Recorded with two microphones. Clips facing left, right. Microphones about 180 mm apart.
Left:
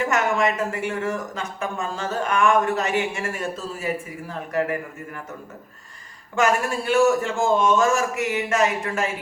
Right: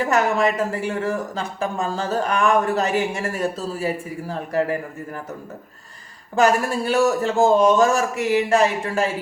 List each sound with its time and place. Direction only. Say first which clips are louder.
0.0 s speech: right 2 dB; 35° right (ahead or behind)
6.3 s speech: right 3 dB; 35° right (ahead or behind)